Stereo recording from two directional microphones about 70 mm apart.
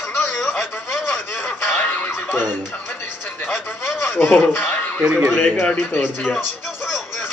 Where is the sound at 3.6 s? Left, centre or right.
Left.